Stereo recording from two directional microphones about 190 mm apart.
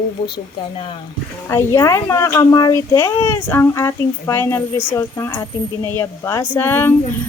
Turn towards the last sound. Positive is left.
turn(degrees=10)  # may be behind; listen again after turning